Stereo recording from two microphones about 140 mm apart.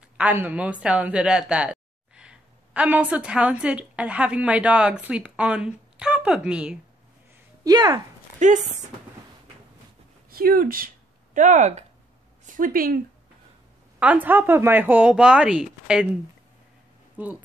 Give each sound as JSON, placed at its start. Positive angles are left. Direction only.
{"t": 0.2, "sound": "speech", "side_deg": -10}
{"t": 7.6, "sound": "speech", "side_deg": -30}
{"t": 8.4, "sound": "speech", "side_deg": -60}
{"t": 10.3, "sound": "speech", "side_deg": -90}
{"t": 11.3, "sound": "speech", "side_deg": -60}
{"t": 12.5, "sound": "speech", "side_deg": -85}
{"t": 13.9, "sound": "speech", "side_deg": -10}
{"t": 17.2, "sound": "speech", "side_deg": -10}